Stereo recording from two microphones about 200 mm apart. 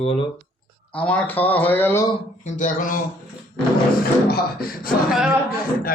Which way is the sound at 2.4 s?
40° left (ahead or behind).